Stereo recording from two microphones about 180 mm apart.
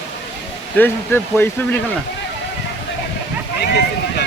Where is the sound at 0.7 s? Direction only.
10° left (ahead or behind).